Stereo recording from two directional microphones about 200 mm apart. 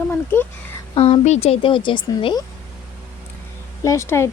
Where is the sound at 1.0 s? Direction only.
30° left (ahead or behind).